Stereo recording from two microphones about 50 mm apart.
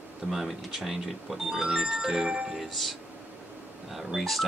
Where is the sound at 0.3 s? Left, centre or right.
Centre.